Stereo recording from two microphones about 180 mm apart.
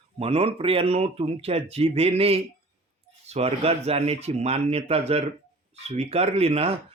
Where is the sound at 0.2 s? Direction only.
35° right (ahead or behind).